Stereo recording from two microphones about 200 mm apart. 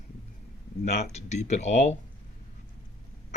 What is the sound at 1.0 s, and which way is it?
Speech, 35° left (ahead or behind).